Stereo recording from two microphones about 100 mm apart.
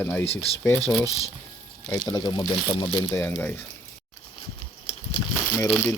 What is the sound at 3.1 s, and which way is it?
Speech, 20° left (ahead or behind).